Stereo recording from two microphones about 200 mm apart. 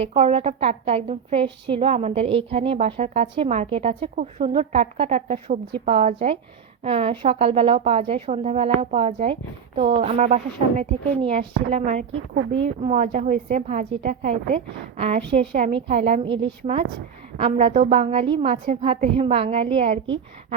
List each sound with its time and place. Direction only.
0.0 s a woman's voice: 30° right (ahead or behind)
12.3 s speech: 60° right (ahead or behind)
12.6 s a woman's voice: 35° right (ahead or behind)